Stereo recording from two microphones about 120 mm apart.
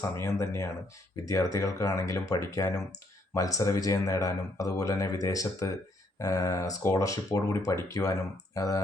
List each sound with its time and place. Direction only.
0.2 s speech: 25° left (ahead or behind)